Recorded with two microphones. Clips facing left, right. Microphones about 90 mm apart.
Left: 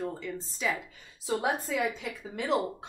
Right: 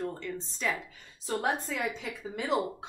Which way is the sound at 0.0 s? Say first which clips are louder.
Even; 5° left (ahead or behind).